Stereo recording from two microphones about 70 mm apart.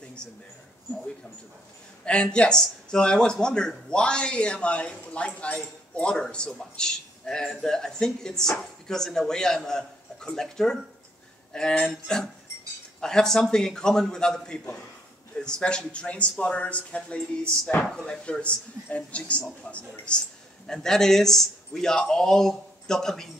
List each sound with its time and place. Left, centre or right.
2.0 s speech: centre